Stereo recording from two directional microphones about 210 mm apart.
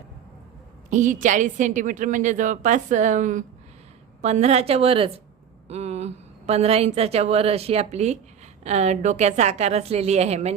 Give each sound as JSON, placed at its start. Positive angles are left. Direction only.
{"t": 0.9, "sound": "a woman's voice", "side_deg": -35}